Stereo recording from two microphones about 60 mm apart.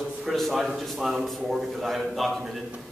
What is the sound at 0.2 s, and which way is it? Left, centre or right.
A man's voice, centre.